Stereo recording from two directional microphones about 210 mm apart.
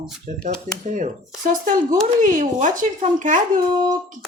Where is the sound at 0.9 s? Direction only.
40° right (ahead or behind).